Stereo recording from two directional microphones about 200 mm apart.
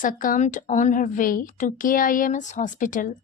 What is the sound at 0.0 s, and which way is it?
Speech, 40° left (ahead or behind).